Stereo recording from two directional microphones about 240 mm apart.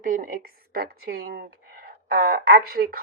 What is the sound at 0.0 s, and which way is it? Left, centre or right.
A woman's voice, right.